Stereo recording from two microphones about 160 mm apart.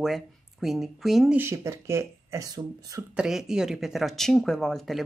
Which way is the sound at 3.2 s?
5° right (ahead or behind).